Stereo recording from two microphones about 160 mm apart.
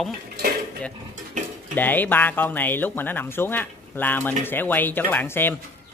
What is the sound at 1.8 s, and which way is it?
Speech, 10° left (ahead or behind).